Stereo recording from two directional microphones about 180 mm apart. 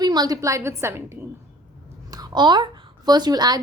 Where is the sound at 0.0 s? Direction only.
20° right (ahead or behind).